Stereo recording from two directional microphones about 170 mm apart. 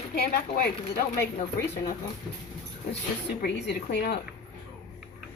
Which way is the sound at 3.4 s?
80° left.